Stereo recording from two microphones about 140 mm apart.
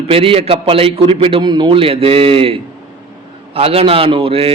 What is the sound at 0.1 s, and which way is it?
Mantra, 40° right (ahead or behind).